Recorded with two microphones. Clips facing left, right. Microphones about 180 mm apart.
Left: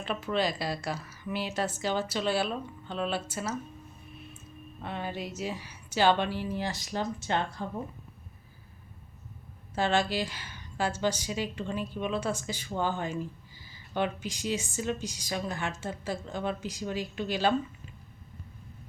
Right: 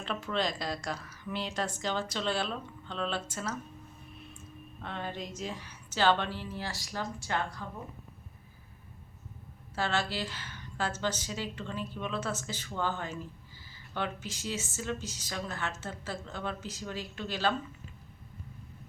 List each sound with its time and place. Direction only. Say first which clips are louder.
0.0 s a woman's voice: left 3 dB; 5° left (ahead or behind)
4.8 s a woman's voice: left 3 dB; 10° left (ahead or behind); by 7.6 s 25° left (ahead or behind)
9.7 s a woman's voice: left 5 dB; 15° left (ahead or behind)